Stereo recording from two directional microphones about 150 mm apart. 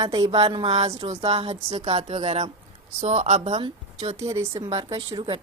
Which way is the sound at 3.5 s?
40° right (ahead or behind).